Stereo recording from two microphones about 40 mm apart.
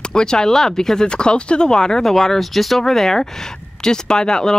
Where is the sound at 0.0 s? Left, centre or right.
Centre.